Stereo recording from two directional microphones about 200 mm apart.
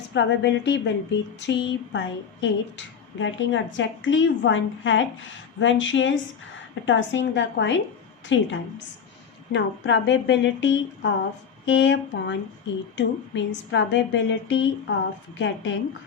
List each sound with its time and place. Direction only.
0.1 s a woman's voice: 60° left (ahead or behind)